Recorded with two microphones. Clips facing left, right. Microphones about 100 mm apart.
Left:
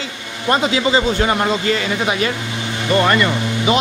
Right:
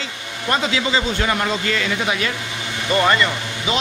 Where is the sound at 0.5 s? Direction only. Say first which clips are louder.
Left 4 dB; 25° left (ahead or behind).